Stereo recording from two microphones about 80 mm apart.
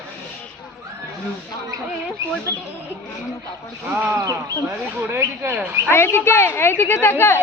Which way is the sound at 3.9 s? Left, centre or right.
Right.